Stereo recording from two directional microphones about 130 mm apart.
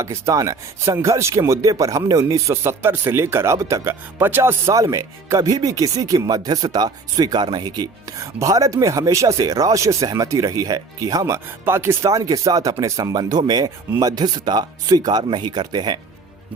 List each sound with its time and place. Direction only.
0.0 s speech: 25° right (ahead or behind)